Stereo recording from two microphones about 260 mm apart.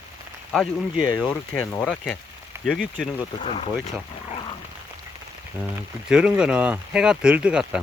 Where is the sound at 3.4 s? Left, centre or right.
Left.